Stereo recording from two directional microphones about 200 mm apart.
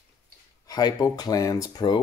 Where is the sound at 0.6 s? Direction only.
20° left (ahead or behind).